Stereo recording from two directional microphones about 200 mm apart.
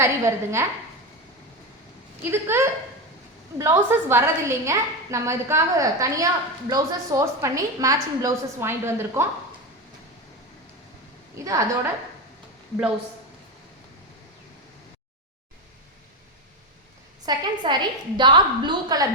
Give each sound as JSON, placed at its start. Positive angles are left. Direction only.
{"t": 0.0, "sound": "a woman's voice", "side_deg": -15}
{"t": 2.2, "sound": "a woman's voice", "side_deg": -10}
{"t": 11.3, "sound": "a woman's voice", "side_deg": -15}
{"t": 17.2, "sound": "a woman's voice", "side_deg": -20}